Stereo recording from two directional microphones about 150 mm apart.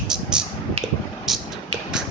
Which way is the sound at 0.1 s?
5° right (ahead or behind).